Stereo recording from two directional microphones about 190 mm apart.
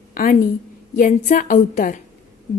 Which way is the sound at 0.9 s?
45° left (ahead or behind).